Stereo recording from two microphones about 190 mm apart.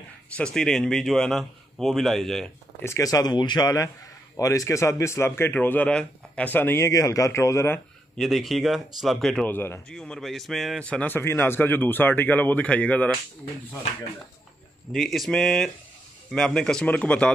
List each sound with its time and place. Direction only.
0.4 s a man's voice: 5° left (ahead or behind)
2.8 s speech: 15° left (ahead or behind)
8.2 s speech: centre (ahead or behind)
14.9 s a man's voice: centre (ahead or behind)